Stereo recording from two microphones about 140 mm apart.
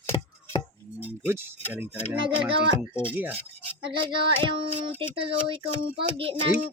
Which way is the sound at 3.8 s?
35° right (ahead or behind).